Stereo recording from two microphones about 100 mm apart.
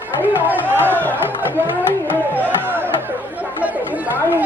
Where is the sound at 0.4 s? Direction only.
20° right (ahead or behind).